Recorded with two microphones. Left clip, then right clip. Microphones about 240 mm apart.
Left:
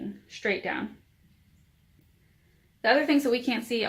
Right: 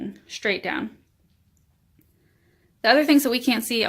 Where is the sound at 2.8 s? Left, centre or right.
Right.